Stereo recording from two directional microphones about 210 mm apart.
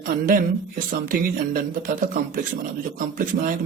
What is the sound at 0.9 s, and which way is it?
Speech, 40° right (ahead or behind).